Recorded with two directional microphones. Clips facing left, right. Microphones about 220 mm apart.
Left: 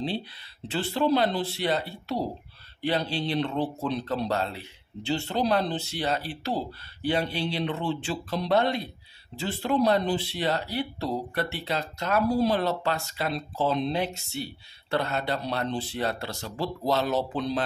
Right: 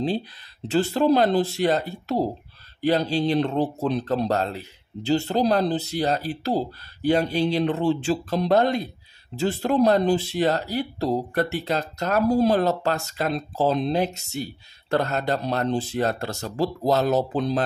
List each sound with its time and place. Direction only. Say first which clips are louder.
0.7 s speech: right 5 dB; 45° right (ahead or behind)